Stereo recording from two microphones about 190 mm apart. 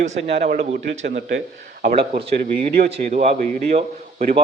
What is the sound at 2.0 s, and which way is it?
Speech, 30° right (ahead or behind).